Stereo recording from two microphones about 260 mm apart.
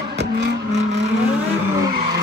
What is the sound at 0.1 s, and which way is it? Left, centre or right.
Vehicle, right.